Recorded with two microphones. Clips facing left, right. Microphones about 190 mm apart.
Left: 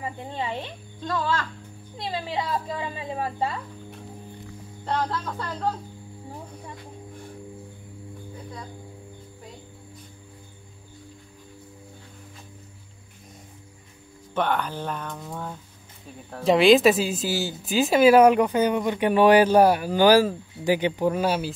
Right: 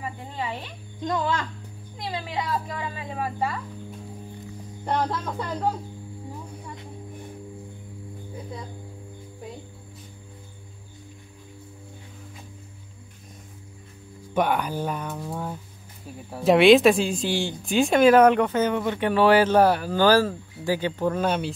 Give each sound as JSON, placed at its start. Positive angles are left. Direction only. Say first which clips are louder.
{"t": 0.0, "sound": "a woman's voice", "louder": "left 1 dB", "side_deg": 25}
{"t": 1.0, "sound": "speech", "louder": "right 1 dB", "side_deg": -15}
{"t": 2.0, "sound": "a woman's voice", "louder": "left 1 dB", "side_deg": 25}
{"t": 4.8, "sound": "speech", "louder": "right 1 dB", "side_deg": -15}
{"t": 14.3, "sound": "speech", "louder": "right 2 dB", "side_deg": -10}